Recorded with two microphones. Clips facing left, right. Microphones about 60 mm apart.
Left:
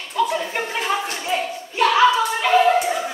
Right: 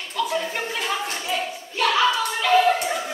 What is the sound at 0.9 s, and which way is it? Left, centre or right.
Clapping, left.